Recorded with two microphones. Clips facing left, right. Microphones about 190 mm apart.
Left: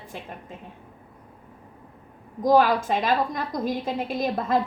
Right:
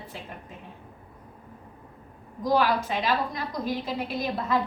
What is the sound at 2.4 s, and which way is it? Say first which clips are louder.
A woman's voice: left 5 dB; 45° left (ahead or behind).